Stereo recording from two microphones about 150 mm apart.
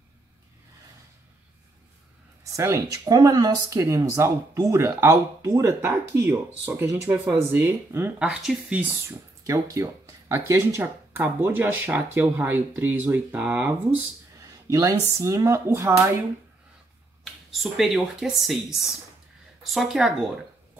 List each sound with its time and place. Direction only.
2.5 s speech: 20° right (ahead or behind)
8.2 s speech: 5° right (ahead or behind)
9.4 s speech: 20° right (ahead or behind)
14.7 s speech: 20° right (ahead or behind)
17.2 s speech: centre (ahead or behind)